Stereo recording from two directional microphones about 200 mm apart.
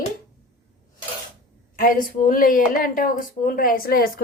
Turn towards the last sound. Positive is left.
turn(degrees=50)  # may be behind; listen again after turning